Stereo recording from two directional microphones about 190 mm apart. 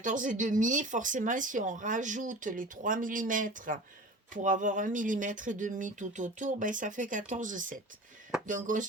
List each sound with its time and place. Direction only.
0.0 s speech: 45° right (ahead or behind)